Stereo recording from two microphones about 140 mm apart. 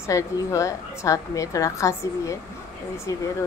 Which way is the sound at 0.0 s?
20° left (ahead or behind).